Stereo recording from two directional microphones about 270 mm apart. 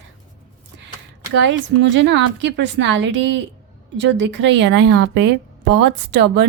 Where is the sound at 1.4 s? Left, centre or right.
Right.